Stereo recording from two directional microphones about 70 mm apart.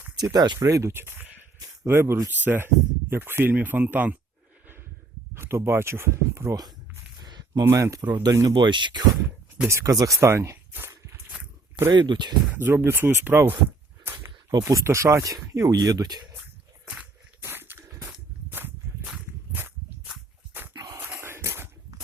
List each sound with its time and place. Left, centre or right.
0.2 s speech: right
0.6 s speech: right
5.3 s speech: right
7.2 s a sound: right
7.6 s speech: right
8.2 s speech: right
9.6 s speech: right
11.9 s speech: right
12.5 s speech: right
14.6 s speech: right
15.7 s speech: right
17.4 s a sound: right
20.7 s a sound: right
21.2 s a sound: right